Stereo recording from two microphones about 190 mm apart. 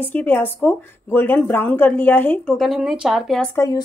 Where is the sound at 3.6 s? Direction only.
20° left (ahead or behind).